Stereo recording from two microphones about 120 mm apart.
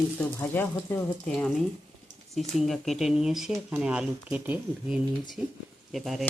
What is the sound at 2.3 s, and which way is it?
Speech, centre (ahead or behind).